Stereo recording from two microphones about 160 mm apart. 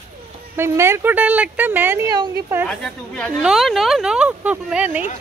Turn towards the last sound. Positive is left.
turn(degrees=-10)  # may be behind; listen again after turning